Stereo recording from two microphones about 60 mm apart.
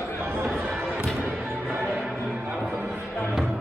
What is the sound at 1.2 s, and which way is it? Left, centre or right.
Music, right.